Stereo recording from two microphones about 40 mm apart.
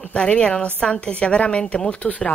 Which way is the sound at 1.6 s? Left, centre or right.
Centre.